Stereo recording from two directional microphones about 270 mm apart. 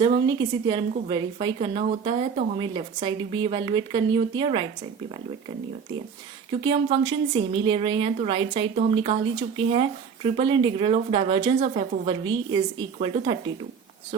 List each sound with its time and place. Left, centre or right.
0.3 s speech: centre
6.5 s a woman's voice: centre